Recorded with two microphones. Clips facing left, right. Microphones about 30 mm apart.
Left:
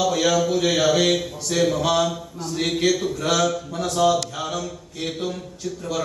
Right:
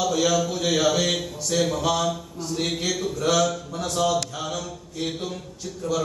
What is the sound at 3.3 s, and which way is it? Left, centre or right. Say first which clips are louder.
Speech: left 1 dB; centre.